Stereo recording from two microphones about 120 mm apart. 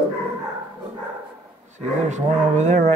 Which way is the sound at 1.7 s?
80° right.